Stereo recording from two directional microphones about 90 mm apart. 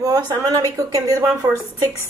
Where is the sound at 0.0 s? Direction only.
40° right (ahead or behind).